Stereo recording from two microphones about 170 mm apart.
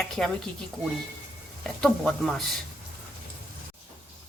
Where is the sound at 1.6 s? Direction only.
5° left (ahead or behind).